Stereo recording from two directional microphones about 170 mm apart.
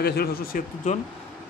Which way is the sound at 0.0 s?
65° left (ahead or behind).